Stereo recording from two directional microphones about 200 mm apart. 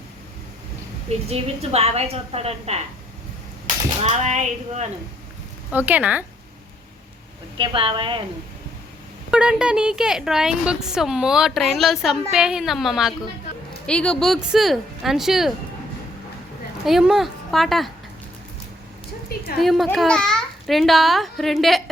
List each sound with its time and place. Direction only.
1.3 s a woman's voice: 30° right (ahead or behind)
4.0 s a woman's voice: 35° right (ahead or behind)
5.7 s speech: 10° right (ahead or behind)
7.6 s a woman's voice: 25° right (ahead or behind)
9.3 s speech: 5° right (ahead or behind)
16.8 s speech: centre (ahead or behind)
19.5 s speech: centre (ahead or behind)